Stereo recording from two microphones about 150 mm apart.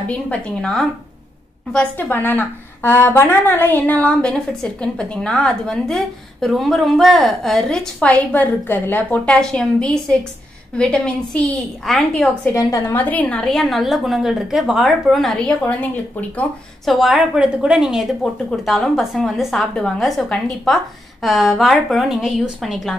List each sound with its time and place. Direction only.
0.1 s a woman's voice: 5° left (ahead or behind)
12.5 s a woman's voice: 20° left (ahead or behind)
16.9 s a woman's voice: centre (ahead or behind)